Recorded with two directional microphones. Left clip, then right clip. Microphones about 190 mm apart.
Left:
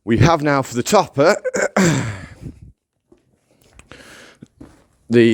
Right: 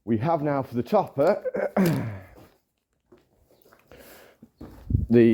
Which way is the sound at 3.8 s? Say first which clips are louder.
Left 9 dB; 35° left (ahead or behind).